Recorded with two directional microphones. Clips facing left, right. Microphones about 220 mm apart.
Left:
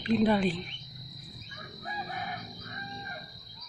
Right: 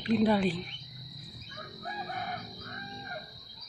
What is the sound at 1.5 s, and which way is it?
Chicken, 50° right (ahead or behind).